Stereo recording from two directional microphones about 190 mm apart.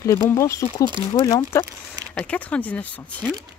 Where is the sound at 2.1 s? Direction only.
5° left (ahead or behind).